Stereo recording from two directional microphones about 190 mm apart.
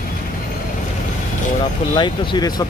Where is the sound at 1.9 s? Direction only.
25° left (ahead or behind).